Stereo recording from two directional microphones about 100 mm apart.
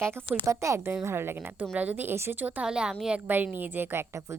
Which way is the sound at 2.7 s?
10° right (ahead or behind).